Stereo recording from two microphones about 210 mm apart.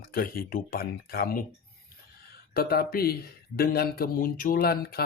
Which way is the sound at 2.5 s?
45° left (ahead or behind).